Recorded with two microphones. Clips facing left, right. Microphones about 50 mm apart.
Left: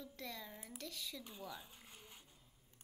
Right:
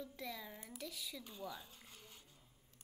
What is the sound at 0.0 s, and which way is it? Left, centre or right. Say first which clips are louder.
A woman's voice: right 2 dB; centre.